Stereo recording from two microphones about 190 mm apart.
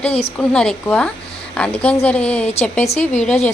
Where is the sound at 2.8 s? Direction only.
35° left (ahead or behind).